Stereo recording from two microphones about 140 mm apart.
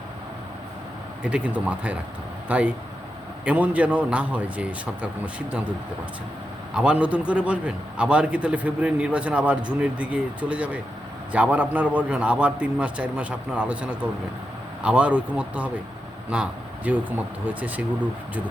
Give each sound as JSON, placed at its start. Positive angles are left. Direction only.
{"t": 1.2, "sound": "a man's voice", "side_deg": -10}
{"t": 6.7, "sound": "a man's voice", "side_deg": -10}